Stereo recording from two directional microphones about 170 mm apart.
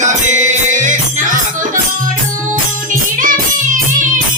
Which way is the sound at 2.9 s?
50° right (ahead or behind).